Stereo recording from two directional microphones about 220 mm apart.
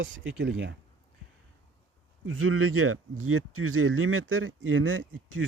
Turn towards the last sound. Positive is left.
turn(degrees=-60)  # may be behind; listen again after turning